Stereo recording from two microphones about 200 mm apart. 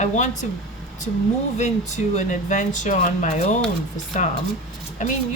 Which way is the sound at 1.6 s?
35° left (ahead or behind).